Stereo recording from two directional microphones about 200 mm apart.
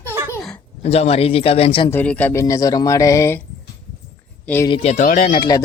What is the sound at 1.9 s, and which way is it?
Speech, 10° left (ahead or behind).